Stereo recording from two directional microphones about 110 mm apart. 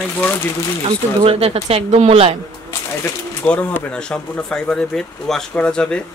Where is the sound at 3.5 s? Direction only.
10° left (ahead or behind).